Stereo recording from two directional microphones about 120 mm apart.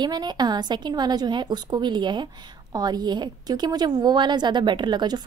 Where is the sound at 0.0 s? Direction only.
35° right (ahead or behind).